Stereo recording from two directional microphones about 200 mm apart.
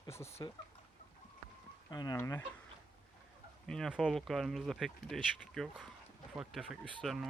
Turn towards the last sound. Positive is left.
turn(degrees=0)  # may be behind; listen again after turning